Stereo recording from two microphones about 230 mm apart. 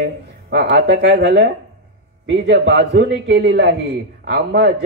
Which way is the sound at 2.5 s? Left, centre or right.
Right.